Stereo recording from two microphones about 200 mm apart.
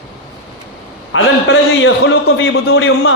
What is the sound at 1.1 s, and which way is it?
A man's voice, 75° left (ahead or behind).